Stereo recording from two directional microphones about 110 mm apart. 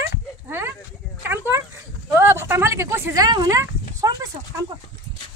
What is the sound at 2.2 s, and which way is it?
Speech, 20° right (ahead or behind).